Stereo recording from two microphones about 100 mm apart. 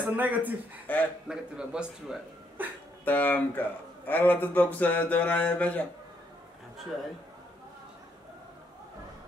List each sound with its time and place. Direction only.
0.0 s speech: 15° right (ahead or behind)
0.9 s speech: 15° left (ahead or behind)
1.3 s speech: 10° right (ahead or behind)
3.1 s speech: 20° left (ahead or behind)